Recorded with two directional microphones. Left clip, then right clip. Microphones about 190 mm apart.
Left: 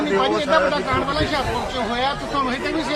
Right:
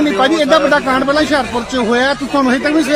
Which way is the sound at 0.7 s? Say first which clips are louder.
Right 9 dB; 65° right (ahead or behind).